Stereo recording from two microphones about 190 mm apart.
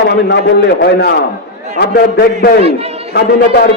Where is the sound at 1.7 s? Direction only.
60° left (ahead or behind).